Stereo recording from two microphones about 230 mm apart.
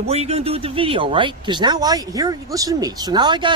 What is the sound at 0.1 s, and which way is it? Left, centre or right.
Speech, right.